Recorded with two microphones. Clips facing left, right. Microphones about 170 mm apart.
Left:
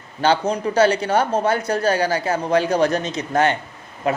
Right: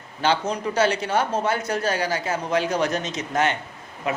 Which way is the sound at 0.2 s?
35° left (ahead or behind).